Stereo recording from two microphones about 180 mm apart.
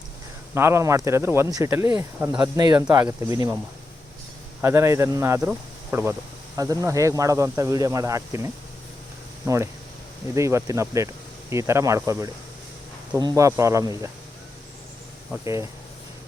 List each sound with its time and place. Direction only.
0.5 s speech: 15° right (ahead or behind)
4.6 s speech: 15° right (ahead or behind)
10.3 s speech: 15° right (ahead or behind)